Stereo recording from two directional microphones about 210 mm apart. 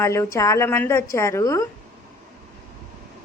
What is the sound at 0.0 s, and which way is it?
A woman's voice, 15° left (ahead or behind).